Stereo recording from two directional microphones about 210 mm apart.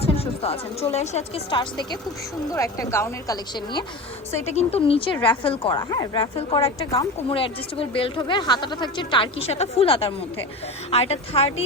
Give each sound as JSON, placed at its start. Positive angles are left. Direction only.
{"t": 0.0, "sound": "a woman's voice", "side_deg": 30}
{"t": 4.4, "sound": "a woman's voice", "side_deg": 30}